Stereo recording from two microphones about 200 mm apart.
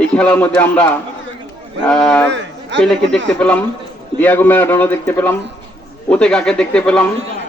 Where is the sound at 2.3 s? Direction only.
65° right (ahead or behind).